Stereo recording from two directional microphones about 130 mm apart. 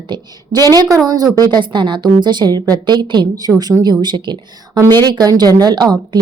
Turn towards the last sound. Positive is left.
turn(degrees=-35)  # may be behind; listen again after turning